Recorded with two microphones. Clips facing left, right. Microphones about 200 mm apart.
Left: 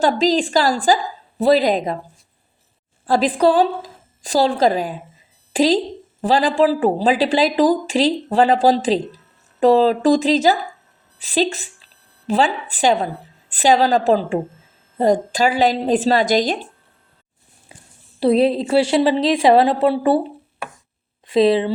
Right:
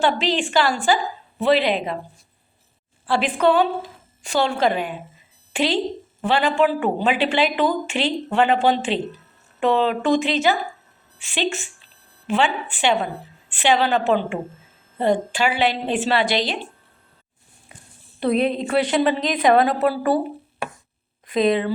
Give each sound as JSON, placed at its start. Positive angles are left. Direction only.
{"t": 0.0, "sound": "a woman's voice", "side_deg": 40}
{"t": 3.1, "sound": "a woman's voice", "side_deg": 35}
{"t": 18.2, "sound": "a woman's voice", "side_deg": 30}
{"t": 21.2, "sound": "speech", "side_deg": 30}